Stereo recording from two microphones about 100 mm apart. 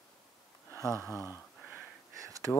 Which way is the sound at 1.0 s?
30° left (ahead or behind).